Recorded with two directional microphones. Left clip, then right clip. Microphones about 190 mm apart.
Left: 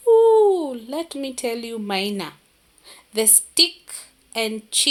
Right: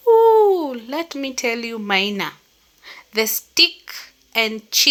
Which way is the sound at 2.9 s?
10° right (ahead or behind).